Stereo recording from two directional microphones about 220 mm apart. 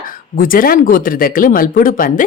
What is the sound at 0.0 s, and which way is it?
Speech, 40° left (ahead or behind).